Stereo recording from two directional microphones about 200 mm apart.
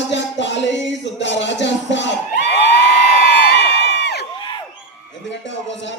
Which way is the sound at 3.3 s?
55° left (ahead or behind).